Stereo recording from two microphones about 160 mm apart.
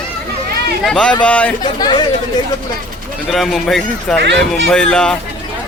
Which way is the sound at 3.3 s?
Centre (ahead or behind).